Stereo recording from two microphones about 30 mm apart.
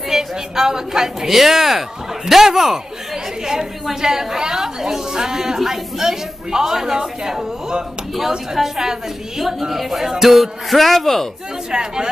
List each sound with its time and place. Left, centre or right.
0.1 s a woman's voice: centre
11.7 s speech: right